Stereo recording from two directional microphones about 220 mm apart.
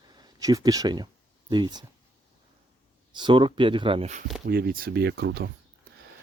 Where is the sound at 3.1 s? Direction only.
20° right (ahead or behind).